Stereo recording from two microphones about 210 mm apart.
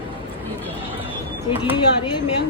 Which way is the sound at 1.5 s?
25° left (ahead or behind).